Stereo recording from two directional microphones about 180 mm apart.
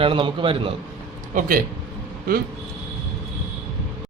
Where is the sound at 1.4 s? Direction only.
50° right (ahead or behind).